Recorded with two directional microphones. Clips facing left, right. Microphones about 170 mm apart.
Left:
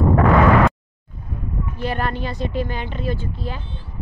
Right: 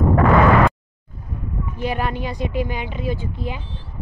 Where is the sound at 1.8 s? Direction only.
10° right (ahead or behind).